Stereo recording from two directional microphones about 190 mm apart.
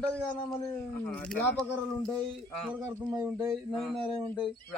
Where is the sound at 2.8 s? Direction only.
15° right (ahead or behind).